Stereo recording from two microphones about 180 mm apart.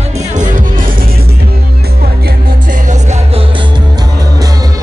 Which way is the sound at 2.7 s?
40° right (ahead or behind).